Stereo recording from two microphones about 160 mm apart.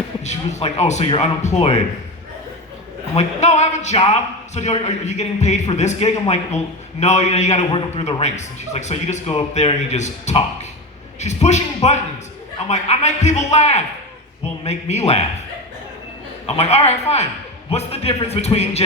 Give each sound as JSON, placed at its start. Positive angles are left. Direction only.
{"t": 0.3, "sound": "a man's voice", "side_deg": 45}
{"t": 3.2, "sound": "a man's voice", "side_deg": 45}
{"t": 16.5, "sound": "speech", "side_deg": 40}